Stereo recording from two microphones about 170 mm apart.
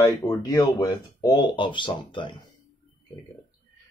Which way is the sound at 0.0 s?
20° left (ahead or behind).